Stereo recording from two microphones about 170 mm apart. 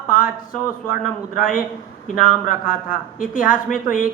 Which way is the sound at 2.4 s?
55° left (ahead or behind).